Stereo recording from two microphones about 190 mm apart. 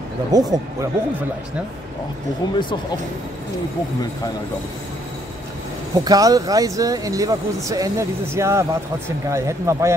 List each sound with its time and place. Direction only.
0.3 s speech: 20° right (ahead or behind)
2.4 s speech: 25° left (ahead or behind)
5.9 s speech: 20° right (ahead or behind)